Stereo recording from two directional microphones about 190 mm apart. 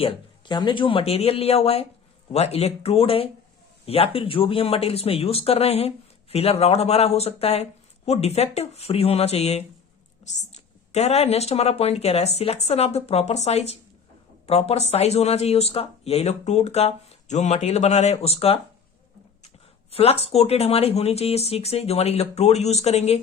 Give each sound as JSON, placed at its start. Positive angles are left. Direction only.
{"t": 0.0, "sound": "speech", "side_deg": 25}
{"t": 10.9, "sound": "speech", "side_deg": 35}
{"t": 19.9, "sound": "speech", "side_deg": 30}